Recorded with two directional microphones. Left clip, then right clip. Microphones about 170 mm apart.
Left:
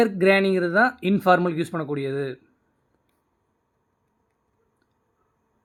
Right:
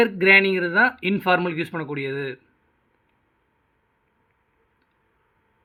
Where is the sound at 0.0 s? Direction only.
45° left (ahead or behind).